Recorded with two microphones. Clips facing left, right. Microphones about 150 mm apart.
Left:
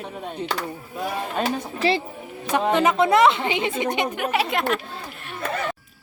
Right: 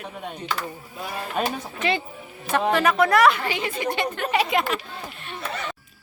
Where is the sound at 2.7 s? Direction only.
20° left (ahead or behind); by 4.6 s centre (ahead or behind).